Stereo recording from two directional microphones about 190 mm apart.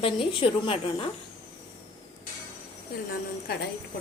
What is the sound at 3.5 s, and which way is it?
Speech, 55° left (ahead or behind).